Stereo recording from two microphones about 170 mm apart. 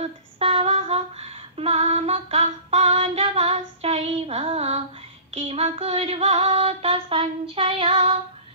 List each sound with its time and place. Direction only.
0.4 s female singing: 35° right (ahead or behind)